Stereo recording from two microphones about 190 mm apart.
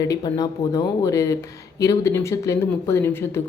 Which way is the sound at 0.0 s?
20° left (ahead or behind).